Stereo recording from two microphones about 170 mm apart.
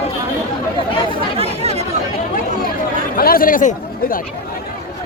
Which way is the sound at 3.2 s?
60° left (ahead or behind).